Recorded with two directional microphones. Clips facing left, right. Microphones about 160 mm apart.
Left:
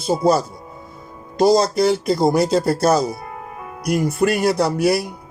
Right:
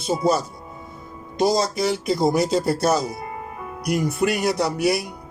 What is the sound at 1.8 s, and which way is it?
A man's voice, 35° left (ahead or behind).